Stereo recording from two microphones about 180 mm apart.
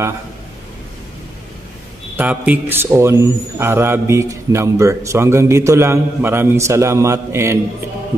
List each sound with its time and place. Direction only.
2.1 s a man's voice: 10° right (ahead or behind)